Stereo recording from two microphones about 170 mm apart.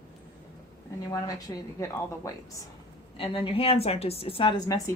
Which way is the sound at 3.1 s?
30° left (ahead or behind).